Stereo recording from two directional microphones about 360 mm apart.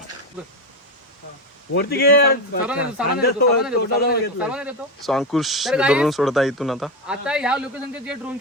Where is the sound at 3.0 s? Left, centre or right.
Centre.